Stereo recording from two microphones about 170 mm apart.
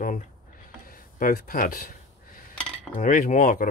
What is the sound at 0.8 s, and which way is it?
Speech, 55° left (ahead or behind).